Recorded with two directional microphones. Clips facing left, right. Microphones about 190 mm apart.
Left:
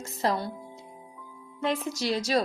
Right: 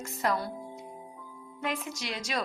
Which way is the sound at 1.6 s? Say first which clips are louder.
Left 6 dB; 35° left (ahead or behind).